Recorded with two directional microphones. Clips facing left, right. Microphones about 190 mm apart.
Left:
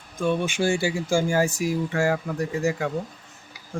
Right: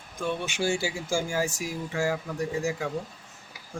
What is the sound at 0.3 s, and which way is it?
Speech, 50° left (ahead or behind).